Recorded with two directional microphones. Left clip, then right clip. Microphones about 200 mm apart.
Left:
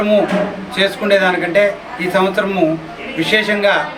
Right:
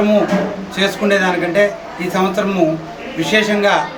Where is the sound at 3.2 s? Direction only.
15° left (ahead or behind).